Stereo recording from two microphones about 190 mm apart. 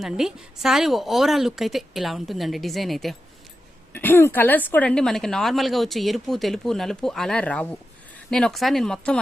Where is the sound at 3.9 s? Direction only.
10° left (ahead or behind).